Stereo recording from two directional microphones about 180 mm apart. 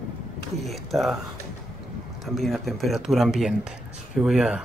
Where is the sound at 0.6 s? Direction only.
Centre (ahead or behind).